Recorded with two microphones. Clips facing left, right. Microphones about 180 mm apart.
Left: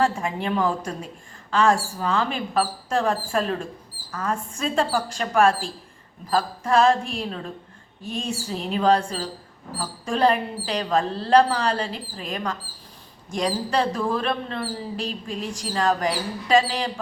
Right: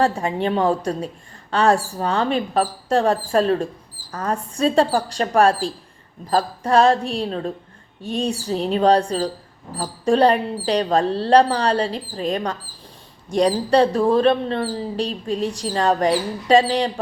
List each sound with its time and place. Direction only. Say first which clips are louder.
0.0 s a woman's voice: right 4 dB; 35° right (ahead or behind)